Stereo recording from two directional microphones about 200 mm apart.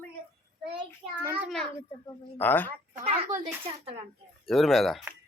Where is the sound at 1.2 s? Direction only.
5° right (ahead or behind).